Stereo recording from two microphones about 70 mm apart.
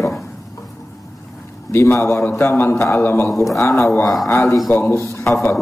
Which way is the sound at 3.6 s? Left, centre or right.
Left.